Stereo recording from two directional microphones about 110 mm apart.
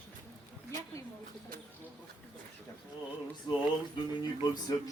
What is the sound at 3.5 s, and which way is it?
Speech, 40° left (ahead or behind).